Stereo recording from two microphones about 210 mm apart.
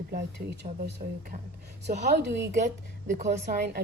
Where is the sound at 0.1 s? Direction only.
50° right (ahead or behind).